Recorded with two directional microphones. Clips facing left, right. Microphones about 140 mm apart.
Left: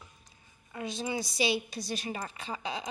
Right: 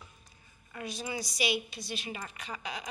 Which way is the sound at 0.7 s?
25° left (ahead or behind).